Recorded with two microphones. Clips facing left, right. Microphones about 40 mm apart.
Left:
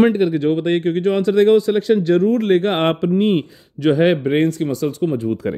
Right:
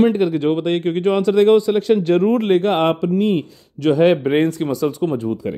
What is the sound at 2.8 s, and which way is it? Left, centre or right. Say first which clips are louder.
Speech: even; left.